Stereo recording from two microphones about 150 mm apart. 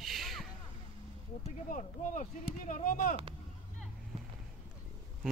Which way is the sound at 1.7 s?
55° left (ahead or behind).